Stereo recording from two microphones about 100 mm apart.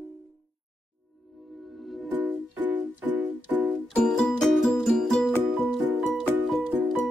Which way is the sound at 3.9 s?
5° left (ahead or behind).